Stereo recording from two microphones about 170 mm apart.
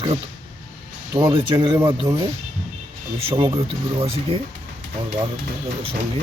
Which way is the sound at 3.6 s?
35° right (ahead or behind).